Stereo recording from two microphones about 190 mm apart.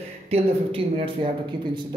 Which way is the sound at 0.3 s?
30° right (ahead or behind).